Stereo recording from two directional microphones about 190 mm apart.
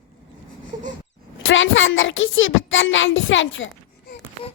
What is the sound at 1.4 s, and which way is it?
A child's voice, 80° left.